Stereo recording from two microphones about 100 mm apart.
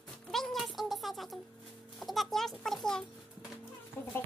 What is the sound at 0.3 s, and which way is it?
Music, centre (ahead or behind).